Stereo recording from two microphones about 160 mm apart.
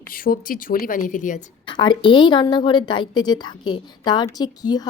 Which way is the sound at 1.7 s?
30° left (ahead or behind).